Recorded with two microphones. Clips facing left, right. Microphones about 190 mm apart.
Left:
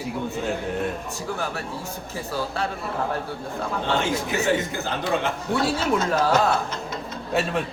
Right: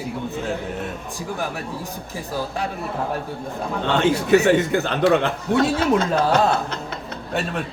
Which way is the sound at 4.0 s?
65° right (ahead or behind).